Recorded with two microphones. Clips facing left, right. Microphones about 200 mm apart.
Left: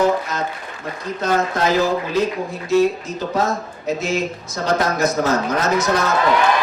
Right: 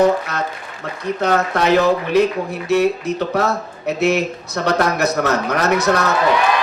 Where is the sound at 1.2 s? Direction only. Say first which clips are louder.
Right 1 dB; 65° right (ahead or behind).